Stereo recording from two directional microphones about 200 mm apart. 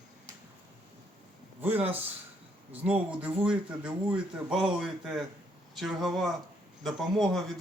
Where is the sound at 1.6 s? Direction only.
10° right (ahead or behind).